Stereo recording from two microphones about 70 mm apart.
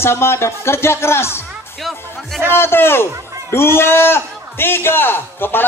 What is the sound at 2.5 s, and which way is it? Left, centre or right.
A man's voice, left.